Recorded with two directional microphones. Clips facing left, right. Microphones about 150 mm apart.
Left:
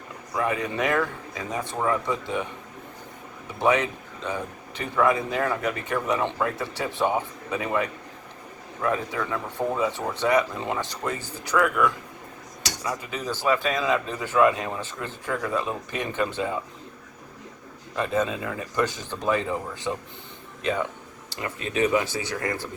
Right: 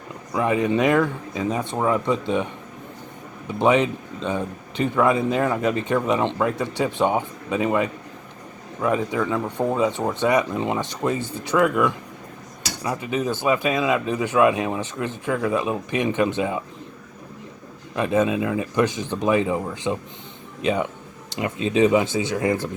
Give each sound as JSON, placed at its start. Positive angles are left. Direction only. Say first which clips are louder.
{"t": 0.3, "sound": "speech", "louder": "right 6 dB", "side_deg": -20}
{"t": 3.6, "sound": "speech", "louder": "right 4 dB", "side_deg": -20}
{"t": 17.9, "sound": "speech", "louder": "right 5 dB", "side_deg": -15}